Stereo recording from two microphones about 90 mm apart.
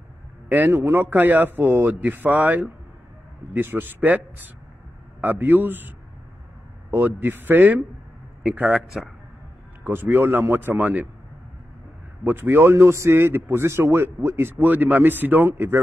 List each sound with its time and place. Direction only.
0.5 s a man's voice: 20° right (ahead or behind)
8.6 s a man's voice: centre (ahead or behind)
9.8 s a man's voice: 20° right (ahead or behind)
12.3 s a man's voice: 25° right (ahead or behind)